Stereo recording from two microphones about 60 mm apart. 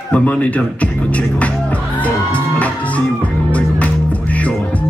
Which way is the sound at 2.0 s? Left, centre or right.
Left.